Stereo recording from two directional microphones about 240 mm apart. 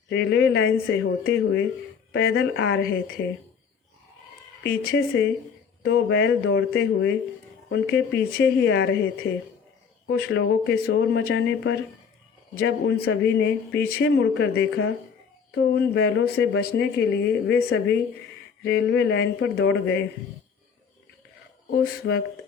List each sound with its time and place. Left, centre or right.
0.1 s speech: left
4.6 s speech: left
21.7 s speech: left